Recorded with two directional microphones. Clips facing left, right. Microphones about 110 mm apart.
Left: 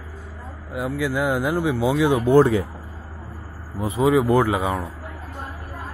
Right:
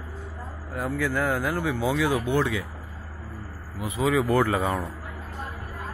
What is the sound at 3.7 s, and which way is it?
Speech, 30° left (ahead or behind).